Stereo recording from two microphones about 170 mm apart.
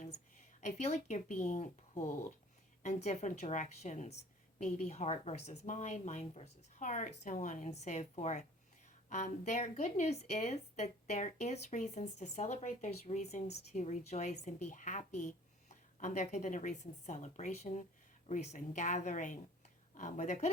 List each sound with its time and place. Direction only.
0.6 s a woman's voice: 40° left (ahead or behind)
2.8 s a woman's voice: 40° left (ahead or behind)